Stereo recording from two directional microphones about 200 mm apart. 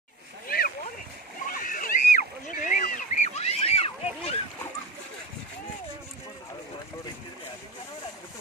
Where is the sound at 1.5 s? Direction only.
45° left (ahead or behind).